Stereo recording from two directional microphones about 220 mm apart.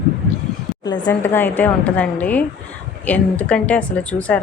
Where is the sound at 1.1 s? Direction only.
10° left (ahead or behind).